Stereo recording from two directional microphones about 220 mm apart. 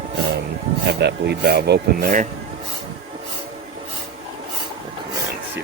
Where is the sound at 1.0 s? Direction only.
50° right (ahead or behind).